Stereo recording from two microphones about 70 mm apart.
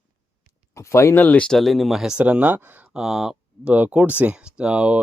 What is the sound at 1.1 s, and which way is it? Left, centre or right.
Speech, left.